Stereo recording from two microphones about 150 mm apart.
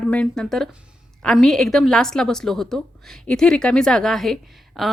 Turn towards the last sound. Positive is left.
turn(degrees=0)  # may be behind; listen again after turning